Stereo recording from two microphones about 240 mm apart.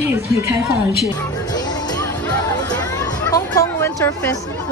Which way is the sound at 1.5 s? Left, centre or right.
Centre.